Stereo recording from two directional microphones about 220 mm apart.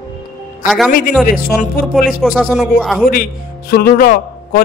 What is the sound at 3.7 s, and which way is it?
Speech, 45° left (ahead or behind).